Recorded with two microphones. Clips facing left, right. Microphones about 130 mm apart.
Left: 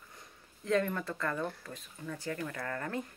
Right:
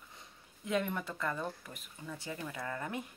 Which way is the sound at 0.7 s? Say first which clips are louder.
Left 4 dB; 15° right (ahead or behind).